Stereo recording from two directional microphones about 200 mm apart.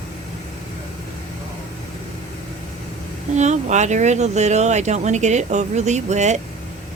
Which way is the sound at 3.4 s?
35° right (ahead or behind).